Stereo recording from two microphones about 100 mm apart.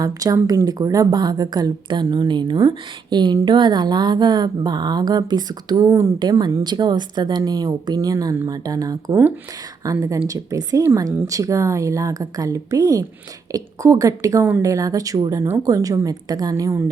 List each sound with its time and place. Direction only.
0.0 s a woman's voice: 35° right (ahead or behind)
5.9 s a woman's voice: 30° right (ahead or behind)
6.1 s a woman's voice: 45° right (ahead or behind)